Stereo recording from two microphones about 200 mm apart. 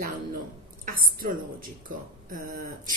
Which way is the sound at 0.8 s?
45° right (ahead or behind).